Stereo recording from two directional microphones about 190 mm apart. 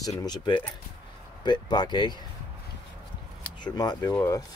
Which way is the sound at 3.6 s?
20° left (ahead or behind).